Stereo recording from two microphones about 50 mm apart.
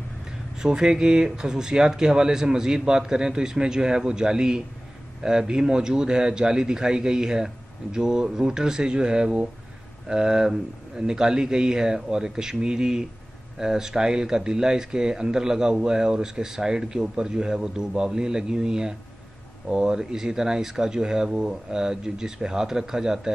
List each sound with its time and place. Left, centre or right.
0.6 s speech: centre